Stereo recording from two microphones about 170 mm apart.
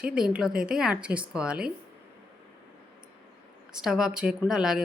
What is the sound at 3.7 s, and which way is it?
Speech, 5° right (ahead or behind).